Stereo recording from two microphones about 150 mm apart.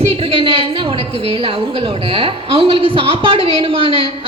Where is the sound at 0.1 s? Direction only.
40° right (ahead or behind).